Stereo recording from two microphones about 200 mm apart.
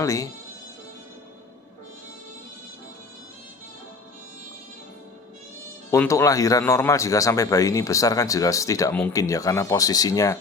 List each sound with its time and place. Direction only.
0.0 s speech: 15° left (ahead or behind)
5.9 s speech: 15° left (ahead or behind)